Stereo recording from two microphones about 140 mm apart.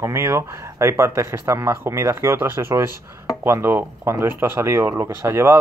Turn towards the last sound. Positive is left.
turn(degrees=-20)  # may be behind; listen again after turning